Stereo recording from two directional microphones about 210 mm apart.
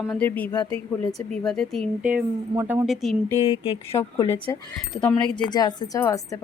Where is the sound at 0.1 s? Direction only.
10° left (ahead or behind).